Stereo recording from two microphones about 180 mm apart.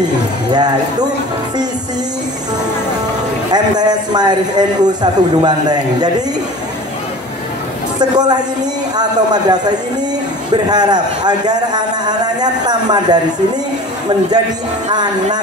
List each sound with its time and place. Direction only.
3.5 s a man's voice: 20° right (ahead or behind)
8.0 s a man's voice: 20° right (ahead or behind)